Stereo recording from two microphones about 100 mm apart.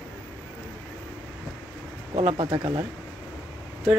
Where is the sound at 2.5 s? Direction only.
55° right (ahead or behind).